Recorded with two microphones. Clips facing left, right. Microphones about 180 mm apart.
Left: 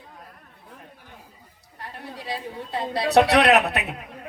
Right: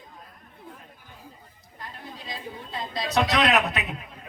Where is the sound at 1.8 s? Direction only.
65° left (ahead or behind).